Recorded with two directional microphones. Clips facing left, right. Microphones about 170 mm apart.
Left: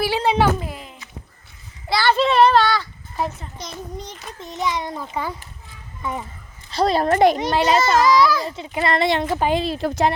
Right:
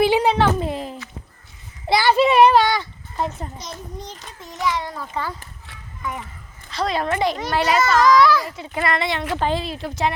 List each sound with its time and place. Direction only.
0.0 s a sound: 20° right (ahead or behind)
0.6 s a sound: 30° right (ahead or behind)
1.9 s a sound: 15° right (ahead or behind)
3.6 s a child's voice: 90° left
4.5 s a child's voice: 20° left (ahead or behind); by 7.2 s 35° left (ahead or behind)
7.3 s a child's voice: 20° left (ahead or behind)
8.0 s a child's voice: centre (ahead or behind)
8.4 s a child's voice: 25° left (ahead or behind)
9.3 s speech: 10° left (ahead or behind)
9.6 s speech: 40° left (ahead or behind)